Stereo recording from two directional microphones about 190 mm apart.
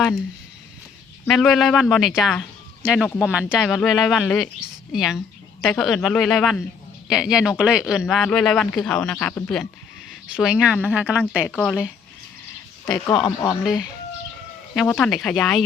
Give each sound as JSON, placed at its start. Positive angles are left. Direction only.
{"t": 1.3, "sound": "speech", "side_deg": 0}
{"t": 12.9, "sound": "speech", "side_deg": 20}
{"t": 14.8, "sound": "speech", "side_deg": 5}